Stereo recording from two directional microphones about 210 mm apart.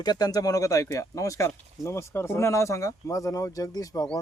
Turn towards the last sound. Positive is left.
turn(degrees=15)  # may be behind; listen again after turning